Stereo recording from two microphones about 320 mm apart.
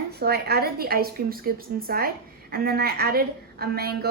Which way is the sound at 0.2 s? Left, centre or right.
Right.